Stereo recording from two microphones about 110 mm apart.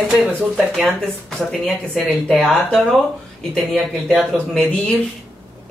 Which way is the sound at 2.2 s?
5° left (ahead or behind).